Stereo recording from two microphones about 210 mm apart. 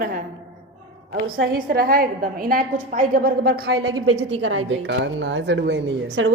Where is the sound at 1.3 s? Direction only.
45° right (ahead or behind).